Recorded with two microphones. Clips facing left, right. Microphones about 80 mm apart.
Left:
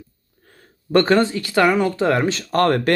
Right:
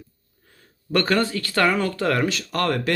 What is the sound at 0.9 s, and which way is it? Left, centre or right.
Speech, left.